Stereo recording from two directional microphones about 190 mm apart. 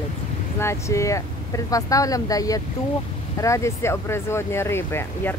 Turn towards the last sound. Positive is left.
turn(degrees=10)  # may be behind; listen again after turning